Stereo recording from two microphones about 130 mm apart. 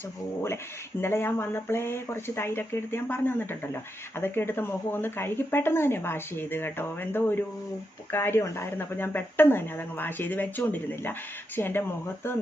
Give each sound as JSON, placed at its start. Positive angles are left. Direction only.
{"t": 1.0, "sound": "speech", "side_deg": 20}